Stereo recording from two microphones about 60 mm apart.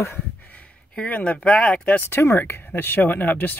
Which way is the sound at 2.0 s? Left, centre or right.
Left.